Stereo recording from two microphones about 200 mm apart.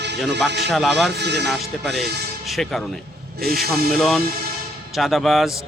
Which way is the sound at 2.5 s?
Centre (ahead or behind).